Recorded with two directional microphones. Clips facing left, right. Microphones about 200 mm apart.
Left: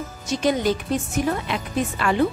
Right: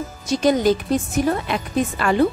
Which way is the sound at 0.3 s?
40° right (ahead or behind).